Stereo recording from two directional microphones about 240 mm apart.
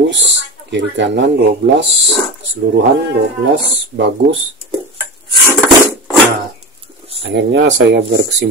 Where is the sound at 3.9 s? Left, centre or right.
Right.